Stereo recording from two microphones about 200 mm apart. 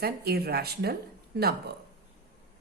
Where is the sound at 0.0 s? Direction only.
50° right (ahead or behind).